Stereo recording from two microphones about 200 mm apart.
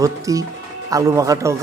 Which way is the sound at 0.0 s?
15° right (ahead or behind).